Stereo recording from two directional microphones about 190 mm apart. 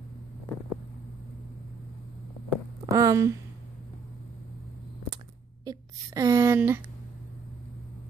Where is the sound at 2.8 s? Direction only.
20° right (ahead or behind).